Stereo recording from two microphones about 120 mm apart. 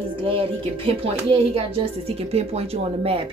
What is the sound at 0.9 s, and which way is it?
Speech, 50° right (ahead or behind).